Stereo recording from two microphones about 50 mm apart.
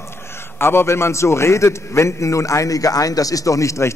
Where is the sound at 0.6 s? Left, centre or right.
Left.